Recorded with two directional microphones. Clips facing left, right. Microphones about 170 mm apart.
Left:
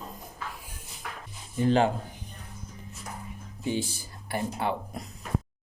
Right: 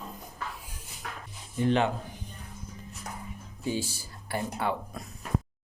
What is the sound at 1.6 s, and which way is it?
Speech, 35° left (ahead or behind).